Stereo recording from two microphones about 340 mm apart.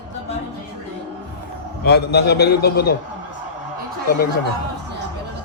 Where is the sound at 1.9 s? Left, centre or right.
Left.